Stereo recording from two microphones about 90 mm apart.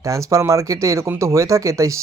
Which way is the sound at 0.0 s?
35° right (ahead or behind).